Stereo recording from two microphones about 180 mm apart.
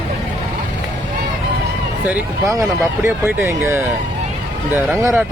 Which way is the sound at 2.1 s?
15° right (ahead or behind).